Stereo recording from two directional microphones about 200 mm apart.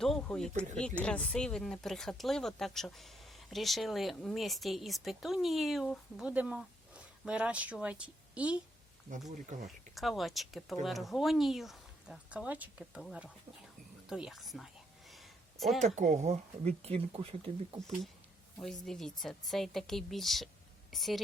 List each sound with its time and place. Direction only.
0.0 s speech: 5° left (ahead or behind)
9.5 s speech: 40° right (ahead or behind)
9.9 s speech: centre (ahead or behind)
15.1 s a sound: centre (ahead or behind)
16.0 s speech: 35° right (ahead or behind)
18.6 s speech: centre (ahead or behind)